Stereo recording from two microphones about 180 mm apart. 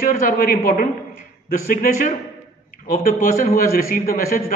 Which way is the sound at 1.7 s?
50° left (ahead or behind).